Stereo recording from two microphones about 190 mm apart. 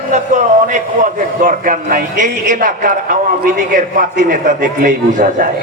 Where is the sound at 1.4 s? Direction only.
45° right (ahead or behind).